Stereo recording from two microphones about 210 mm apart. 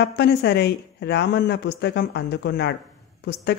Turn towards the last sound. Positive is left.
turn(degrees=50)  # may be behind; listen again after turning